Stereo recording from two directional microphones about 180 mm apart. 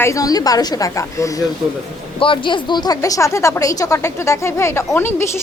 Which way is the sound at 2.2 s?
30° left (ahead or behind).